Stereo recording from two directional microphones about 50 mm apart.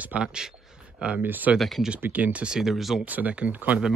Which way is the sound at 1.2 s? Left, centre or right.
Right.